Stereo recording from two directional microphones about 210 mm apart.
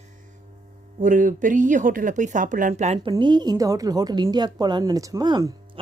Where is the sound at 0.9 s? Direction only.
40° right (ahead or behind).